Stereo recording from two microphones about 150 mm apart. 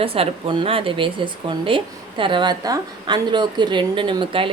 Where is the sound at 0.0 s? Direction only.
40° right (ahead or behind).